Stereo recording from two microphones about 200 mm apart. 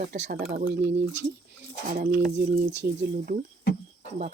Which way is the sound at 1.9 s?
55° right (ahead or behind).